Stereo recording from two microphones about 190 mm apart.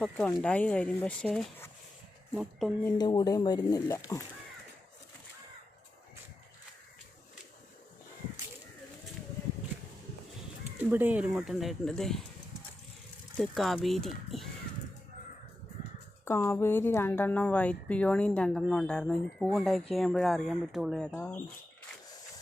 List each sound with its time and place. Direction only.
0.0 s speech: 5° left (ahead or behind)
3.0 s speech: 20° left (ahead or behind)
10.9 s speech: 10° right (ahead or behind)
13.4 s speech: centre (ahead or behind)
16.2 s speech: 15° left (ahead or behind)